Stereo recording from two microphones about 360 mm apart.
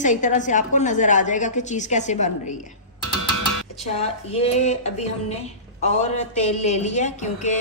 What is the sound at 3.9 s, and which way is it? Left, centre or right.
A woman's voice, centre.